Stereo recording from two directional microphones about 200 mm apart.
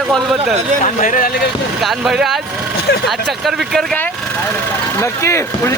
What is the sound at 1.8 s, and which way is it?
Speech, centre (ahead or behind).